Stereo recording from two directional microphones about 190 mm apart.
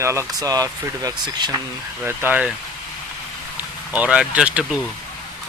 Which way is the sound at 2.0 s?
10° right (ahead or behind).